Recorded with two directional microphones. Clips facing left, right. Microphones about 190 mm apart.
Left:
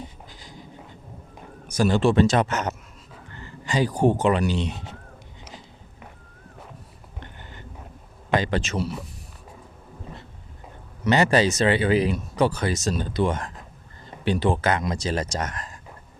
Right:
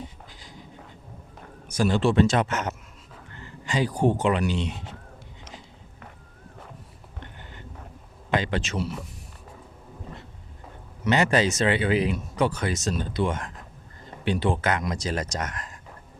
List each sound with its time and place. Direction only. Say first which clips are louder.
1.6 s speech: left 2 dB; 40° left (ahead or behind)
8.3 s speech: left 3 dB; 40° left (ahead or behind)
11.0 s speech: left 2 dB; 35° left (ahead or behind)